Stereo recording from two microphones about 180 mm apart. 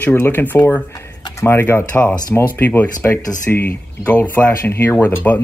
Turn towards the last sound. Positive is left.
turn(degrees=10)  # may be behind; listen again after turning